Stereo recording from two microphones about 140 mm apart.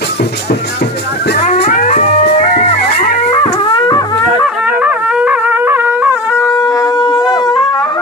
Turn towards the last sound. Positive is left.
turn(degrees=30)  # may be behind; listen again after turning